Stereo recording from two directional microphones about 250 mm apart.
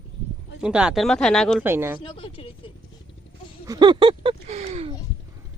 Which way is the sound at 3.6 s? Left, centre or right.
Centre.